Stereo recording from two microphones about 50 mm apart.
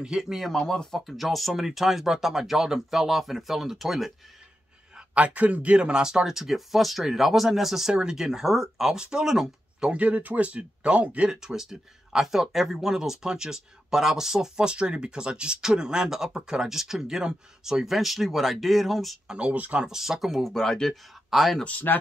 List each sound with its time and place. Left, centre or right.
0.0 s speech: centre
0.5 s speech: centre
1.0 s speech: centre
5.1 s speech: right; by 9.9 s centre
9.9 s speech: right
11.2 s speech: centre
19.2 s speech: right
19.9 s speech: centre
20.5 s speech: centre
21.6 s speech: left